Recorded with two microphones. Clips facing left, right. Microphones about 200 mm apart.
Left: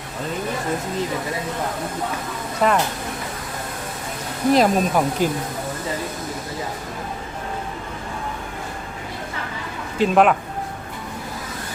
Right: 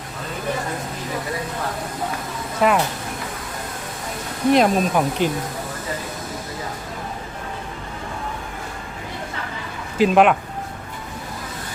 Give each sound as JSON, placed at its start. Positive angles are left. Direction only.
{"t": 2.6, "sound": "speech", "side_deg": -5}
{"t": 4.5, "sound": "speech", "side_deg": 0}
{"t": 10.0, "sound": "speech", "side_deg": 0}